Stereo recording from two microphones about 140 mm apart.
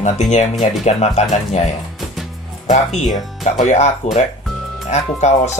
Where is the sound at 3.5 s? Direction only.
60° left (ahead or behind).